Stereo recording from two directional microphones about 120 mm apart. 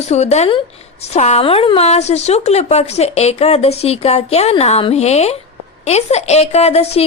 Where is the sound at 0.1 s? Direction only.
65° left (ahead or behind).